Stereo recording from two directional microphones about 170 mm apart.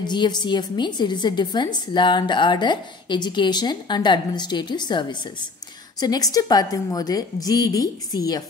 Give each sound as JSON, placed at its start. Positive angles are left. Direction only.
{"t": 0.0, "sound": "a woman's voice", "side_deg": 25}